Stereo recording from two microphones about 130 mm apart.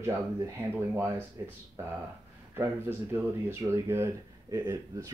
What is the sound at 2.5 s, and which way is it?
Speech, 20° right (ahead or behind).